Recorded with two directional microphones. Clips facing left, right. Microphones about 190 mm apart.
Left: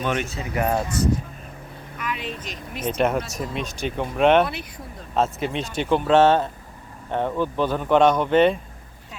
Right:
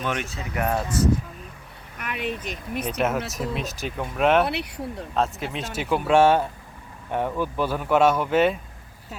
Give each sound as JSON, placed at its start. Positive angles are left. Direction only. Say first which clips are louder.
{"t": 0.0, "sound": "speech", "louder": "left 3 dB", "side_deg": 0}
{"t": 0.5, "sound": "speech", "louder": "left 2 dB", "side_deg": 25}
{"t": 2.0, "sound": "speech", "louder": "right 1 dB", "side_deg": -60}
{"t": 3.0, "sound": "speech", "louder": "left 3 dB", "side_deg": -5}
{"t": 4.4, "sound": "speech", "louder": "right 4 dB", "side_deg": -70}
{"t": 5.1, "sound": "speech", "louder": "left 4 dB", "side_deg": 0}